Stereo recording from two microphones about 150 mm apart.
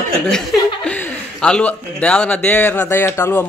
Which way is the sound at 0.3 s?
5° left (ahead or behind).